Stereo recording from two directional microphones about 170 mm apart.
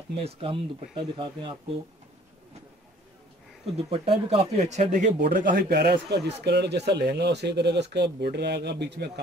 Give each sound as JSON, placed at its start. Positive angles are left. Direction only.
{"t": 0.2, "sound": "speech", "side_deg": -35}
{"t": 3.7, "sound": "speech", "side_deg": -35}